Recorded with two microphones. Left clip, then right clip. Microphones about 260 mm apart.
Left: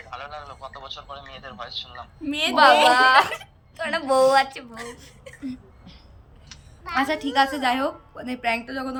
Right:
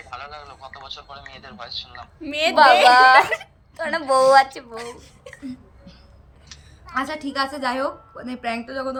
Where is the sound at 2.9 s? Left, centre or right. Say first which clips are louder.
Right 4 dB; right.